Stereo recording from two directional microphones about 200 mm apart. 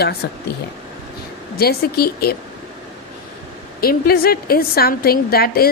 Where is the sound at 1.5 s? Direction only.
50° left (ahead or behind).